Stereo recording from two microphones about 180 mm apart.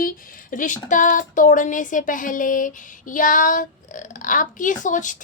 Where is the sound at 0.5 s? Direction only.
45° left (ahead or behind).